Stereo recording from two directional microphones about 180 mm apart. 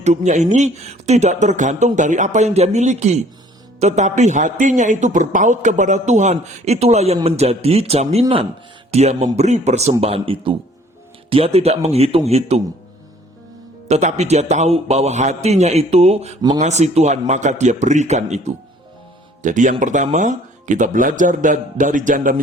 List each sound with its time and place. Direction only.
0.0 s a man's voice: 40° right (ahead or behind)
13.8 s a man's voice: 35° right (ahead or behind)